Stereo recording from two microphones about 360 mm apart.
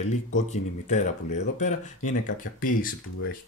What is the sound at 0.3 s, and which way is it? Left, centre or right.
Speech, centre.